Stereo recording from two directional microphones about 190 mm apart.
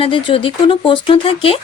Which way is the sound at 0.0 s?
30° left (ahead or behind).